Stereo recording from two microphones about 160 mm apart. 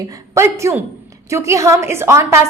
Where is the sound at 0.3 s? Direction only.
15° right (ahead or behind).